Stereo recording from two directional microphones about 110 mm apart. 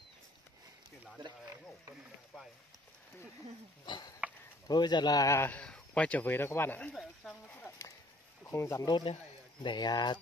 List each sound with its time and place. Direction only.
3.8 s a man's voice: 40° left (ahead or behind)
5.5 s speech: 10° left (ahead or behind)
8.5 s speech: 25° left (ahead or behind)
8.8 s a man's voice: 45° left (ahead or behind)